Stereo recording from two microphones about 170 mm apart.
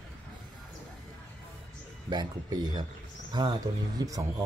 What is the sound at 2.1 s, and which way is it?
Speech, 25° right (ahead or behind).